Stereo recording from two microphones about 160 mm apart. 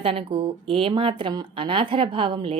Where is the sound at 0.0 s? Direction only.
35° right (ahead or behind).